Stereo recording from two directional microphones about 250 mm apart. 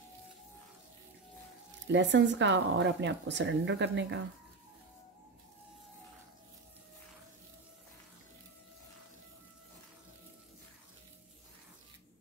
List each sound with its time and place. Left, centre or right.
1.9 s speech: right